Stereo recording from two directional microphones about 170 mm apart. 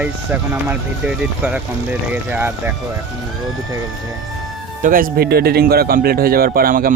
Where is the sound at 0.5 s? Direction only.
10° right (ahead or behind).